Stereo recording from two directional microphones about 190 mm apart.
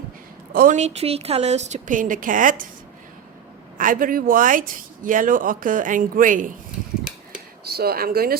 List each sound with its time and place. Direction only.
0.5 s a woman's voice: 45° right (ahead or behind)
3.8 s speech: 45° right (ahead or behind)
7.6 s speech: 55° right (ahead or behind)